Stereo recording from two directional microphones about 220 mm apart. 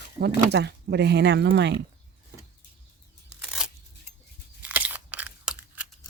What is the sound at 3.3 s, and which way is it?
Scissors, 5° right (ahead or behind).